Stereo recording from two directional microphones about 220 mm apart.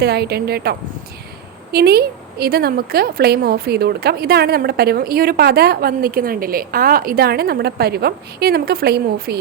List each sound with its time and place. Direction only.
0.0 s a woman's voice: 45° right (ahead or behind)